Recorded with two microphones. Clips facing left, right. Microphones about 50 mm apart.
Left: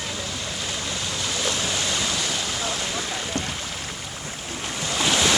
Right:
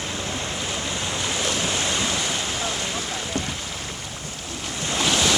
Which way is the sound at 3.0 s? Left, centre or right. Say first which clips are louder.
Even; centre.